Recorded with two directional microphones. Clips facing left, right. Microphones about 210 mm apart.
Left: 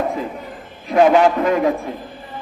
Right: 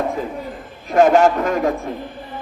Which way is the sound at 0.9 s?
45° right (ahead or behind).